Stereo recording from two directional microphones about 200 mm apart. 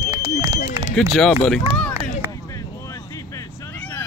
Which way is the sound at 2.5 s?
15° left (ahead or behind).